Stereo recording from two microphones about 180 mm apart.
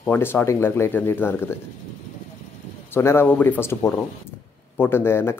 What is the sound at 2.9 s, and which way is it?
Speech, 15° left (ahead or behind).